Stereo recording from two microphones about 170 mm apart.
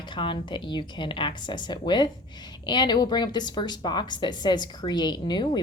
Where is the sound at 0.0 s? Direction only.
30° left (ahead or behind).